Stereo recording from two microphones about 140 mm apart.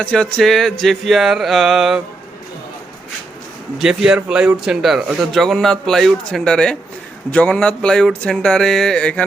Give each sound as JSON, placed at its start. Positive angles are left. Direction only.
{"t": 0.0, "sound": "speech", "side_deg": 5}
{"t": 3.8, "sound": "speech", "side_deg": -5}